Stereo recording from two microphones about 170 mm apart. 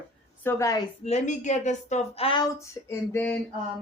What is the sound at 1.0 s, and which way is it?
A woman's voice, 45° left (ahead or behind).